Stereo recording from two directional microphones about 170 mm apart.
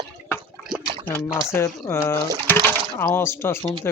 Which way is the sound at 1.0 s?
15° left (ahead or behind).